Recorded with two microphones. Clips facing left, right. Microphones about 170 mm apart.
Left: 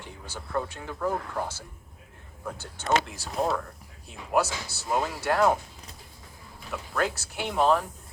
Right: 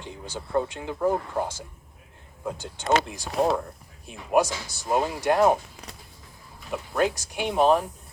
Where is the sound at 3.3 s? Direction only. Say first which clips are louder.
Right 4 dB; 80° right.